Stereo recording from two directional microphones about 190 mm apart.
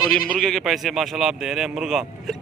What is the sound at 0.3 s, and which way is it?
Speech, centre (ahead or behind).